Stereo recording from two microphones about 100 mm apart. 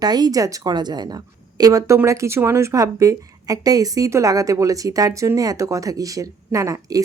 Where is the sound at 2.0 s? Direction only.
25° right (ahead or behind).